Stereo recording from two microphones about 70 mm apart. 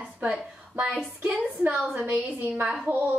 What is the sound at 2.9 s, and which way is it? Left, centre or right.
Speech, right.